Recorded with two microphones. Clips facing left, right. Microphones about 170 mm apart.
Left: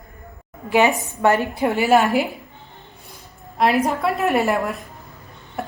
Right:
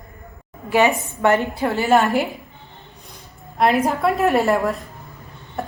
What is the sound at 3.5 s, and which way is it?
A woman's voice, centre (ahead or behind).